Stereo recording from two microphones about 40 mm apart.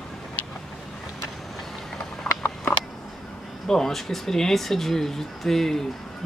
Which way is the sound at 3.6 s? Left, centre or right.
Centre.